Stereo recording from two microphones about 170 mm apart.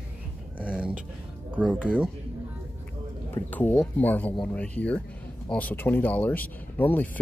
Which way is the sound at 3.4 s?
10° left (ahead or behind).